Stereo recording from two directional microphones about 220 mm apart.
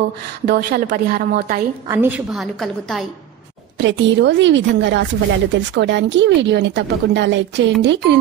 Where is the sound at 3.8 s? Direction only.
55° right (ahead or behind).